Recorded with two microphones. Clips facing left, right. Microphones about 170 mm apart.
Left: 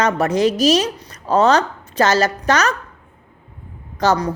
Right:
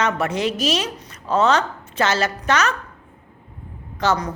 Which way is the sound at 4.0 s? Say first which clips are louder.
Left 4 dB; 35° left (ahead or behind).